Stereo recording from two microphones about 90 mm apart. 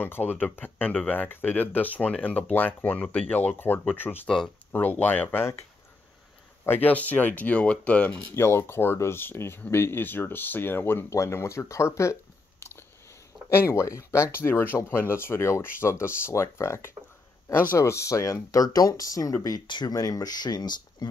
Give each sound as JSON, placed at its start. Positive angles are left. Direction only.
{"t": 0.0, "sound": "speech", "side_deg": 20}
{"t": 8.4, "sound": "speech", "side_deg": 30}